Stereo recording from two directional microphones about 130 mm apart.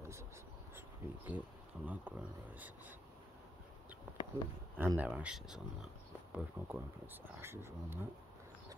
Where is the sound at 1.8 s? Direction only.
15° right (ahead or behind).